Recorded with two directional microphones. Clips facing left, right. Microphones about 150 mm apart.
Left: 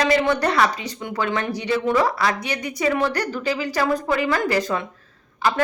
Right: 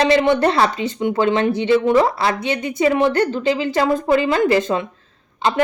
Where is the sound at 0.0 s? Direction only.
25° right (ahead or behind).